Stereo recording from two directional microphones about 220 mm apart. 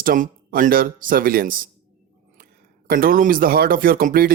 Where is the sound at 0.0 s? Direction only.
40° right (ahead or behind).